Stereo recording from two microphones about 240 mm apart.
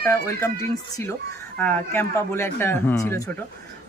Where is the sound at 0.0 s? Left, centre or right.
Centre.